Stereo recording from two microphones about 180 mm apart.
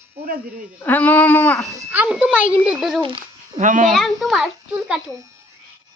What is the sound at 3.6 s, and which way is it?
Speech, 45° right (ahead or behind).